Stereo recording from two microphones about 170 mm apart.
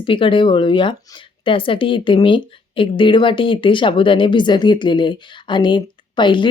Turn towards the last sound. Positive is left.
turn(degrees=30)  # may be behind; listen again after turning